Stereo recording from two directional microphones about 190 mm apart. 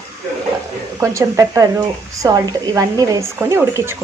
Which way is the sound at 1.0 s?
15° right (ahead or behind).